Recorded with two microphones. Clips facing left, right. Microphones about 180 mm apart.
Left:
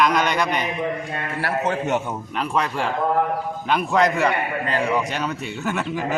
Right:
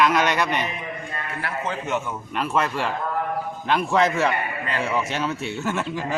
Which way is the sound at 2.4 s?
5° right (ahead or behind).